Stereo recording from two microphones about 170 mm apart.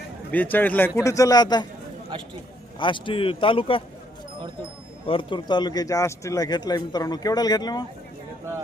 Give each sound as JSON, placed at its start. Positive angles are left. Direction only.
{"t": 0.3, "sound": "a man's voice", "side_deg": 10}
{"t": 2.7, "sound": "speech", "side_deg": 30}
{"t": 5.0, "sound": "speech", "side_deg": 30}